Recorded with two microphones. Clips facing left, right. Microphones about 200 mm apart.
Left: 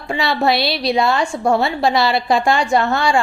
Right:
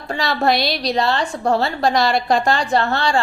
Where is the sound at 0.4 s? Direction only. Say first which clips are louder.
Even; 45° right (ahead or behind).